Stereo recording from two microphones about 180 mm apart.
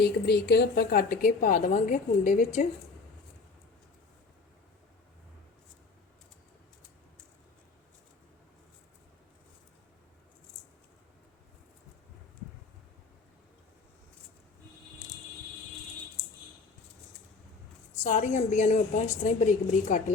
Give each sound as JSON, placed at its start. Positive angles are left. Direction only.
{"t": 0.0, "sound": "a woman's voice", "side_deg": 65}
{"t": 17.9, "sound": "a woman's voice", "side_deg": 40}